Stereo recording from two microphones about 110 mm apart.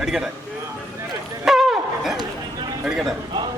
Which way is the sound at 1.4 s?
5° right (ahead or behind).